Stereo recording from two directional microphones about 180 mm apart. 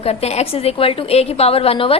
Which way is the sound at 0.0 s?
35° left (ahead or behind).